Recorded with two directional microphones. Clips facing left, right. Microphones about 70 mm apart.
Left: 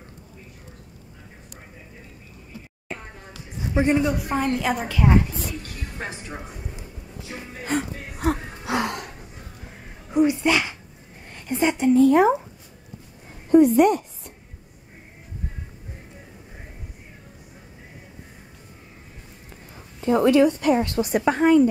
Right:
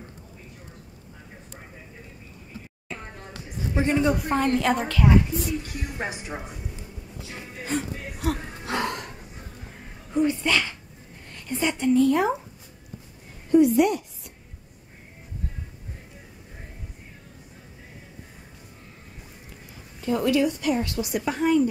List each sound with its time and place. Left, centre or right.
3.7 s speech: centre
4.0 s a woman's voice: centre
5.8 s a woman's voice: centre
7.6 s music: left
8.6 s gasp: centre
10.1 s a woman's voice: centre
13.5 s a sound: left
20.0 s a woman's voice: left